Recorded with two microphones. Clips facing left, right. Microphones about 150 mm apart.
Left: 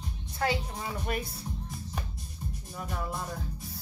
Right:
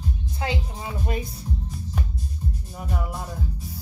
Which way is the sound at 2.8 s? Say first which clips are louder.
Right 3 dB; 10° right (ahead or behind).